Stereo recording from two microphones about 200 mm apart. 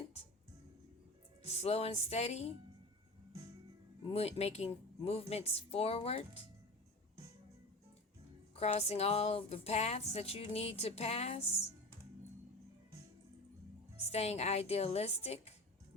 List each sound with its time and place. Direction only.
1.5 s speech: 30° left (ahead or behind)
4.1 s speech: 30° left (ahead or behind)
8.5 s speech: 30° left (ahead or behind)
14.1 s speech: 30° left (ahead or behind)